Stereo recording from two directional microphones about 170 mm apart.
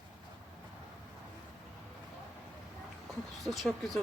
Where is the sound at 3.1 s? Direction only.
Centre (ahead or behind).